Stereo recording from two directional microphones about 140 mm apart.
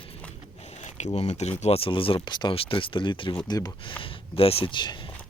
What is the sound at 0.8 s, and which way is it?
Speech, 50° left (ahead or behind).